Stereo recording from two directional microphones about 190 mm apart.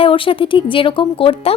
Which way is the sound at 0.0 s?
25° left (ahead or behind).